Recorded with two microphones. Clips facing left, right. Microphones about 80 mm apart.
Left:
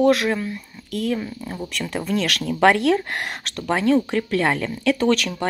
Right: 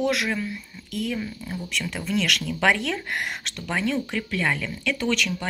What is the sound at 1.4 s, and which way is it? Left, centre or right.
Speech, left.